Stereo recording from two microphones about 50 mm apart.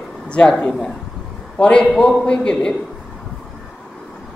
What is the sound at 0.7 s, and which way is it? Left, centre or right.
Speech, centre.